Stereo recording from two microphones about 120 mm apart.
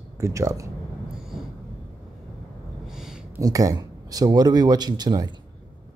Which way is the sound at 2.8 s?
5° right (ahead or behind).